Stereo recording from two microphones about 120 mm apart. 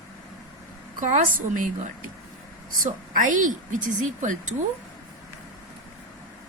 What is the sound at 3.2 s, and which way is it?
A woman's voice, 90° right.